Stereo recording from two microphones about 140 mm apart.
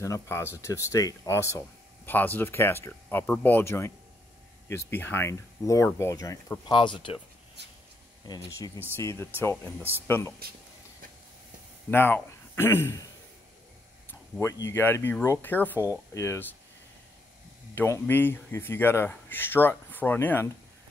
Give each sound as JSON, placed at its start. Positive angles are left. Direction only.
{"t": 0.0, "sound": "speech", "side_deg": 20}
{"t": 6.7, "sound": "speech", "side_deg": 35}
{"t": 8.3, "sound": "speech", "side_deg": 25}
{"t": 11.9, "sound": "speech", "side_deg": 15}
{"t": 14.4, "sound": "speech", "side_deg": 20}
{"t": 17.7, "sound": "speech", "side_deg": 20}